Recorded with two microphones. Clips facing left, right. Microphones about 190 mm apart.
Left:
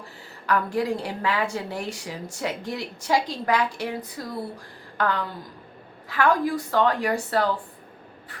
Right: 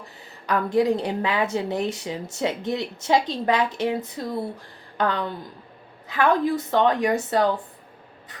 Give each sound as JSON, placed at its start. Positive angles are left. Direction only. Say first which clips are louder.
{"t": 0.4, "sound": "a woman's voice", "louder": "right 4 dB", "side_deg": -20}
{"t": 4.9, "sound": "a sound", "louder": "right 1 dB", "side_deg": -20}
{"t": 6.1, "sound": "a woman's voice", "louder": "right 1 dB", "side_deg": -20}